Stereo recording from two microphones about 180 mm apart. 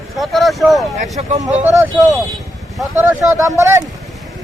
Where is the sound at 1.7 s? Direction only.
15° right (ahead or behind).